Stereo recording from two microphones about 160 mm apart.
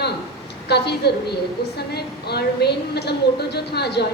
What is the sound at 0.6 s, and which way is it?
Speech, 90° left.